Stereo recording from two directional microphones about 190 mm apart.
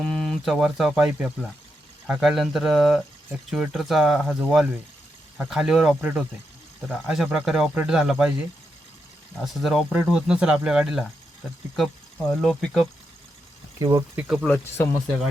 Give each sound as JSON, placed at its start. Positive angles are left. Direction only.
{"t": 0.0, "sound": "speech", "side_deg": 0}
{"t": 9.4, "sound": "speech", "side_deg": 0}
{"t": 12.4, "sound": "speech", "side_deg": 0}
{"t": 13.7, "sound": "speech", "side_deg": -20}
{"t": 14.2, "sound": "speech", "side_deg": 0}